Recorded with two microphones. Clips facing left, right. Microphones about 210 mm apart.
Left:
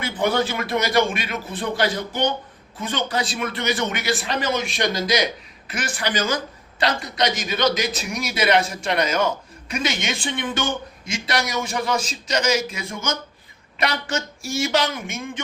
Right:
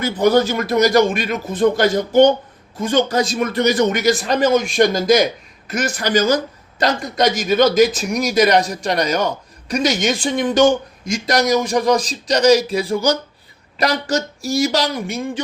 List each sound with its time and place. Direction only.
0.0 s speech: 40° right (ahead or behind)